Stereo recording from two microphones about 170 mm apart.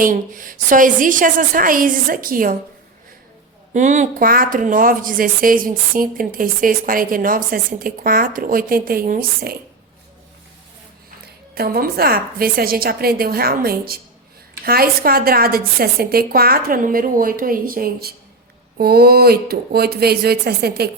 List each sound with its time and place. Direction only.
0.0 s a woman's voice: 50° right (ahead or behind)
3.7 s speech: 45° right (ahead or behind)
11.5 s speech: 65° right (ahead or behind)